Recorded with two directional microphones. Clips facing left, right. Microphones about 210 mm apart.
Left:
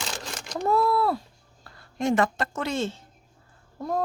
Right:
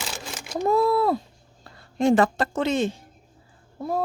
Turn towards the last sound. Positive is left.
turn(degrees=-10)  # may be behind; listen again after turning